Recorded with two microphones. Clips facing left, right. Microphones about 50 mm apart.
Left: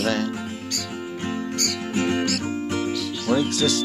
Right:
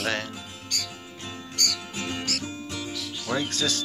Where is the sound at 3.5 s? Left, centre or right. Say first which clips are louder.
Left 6 dB; right.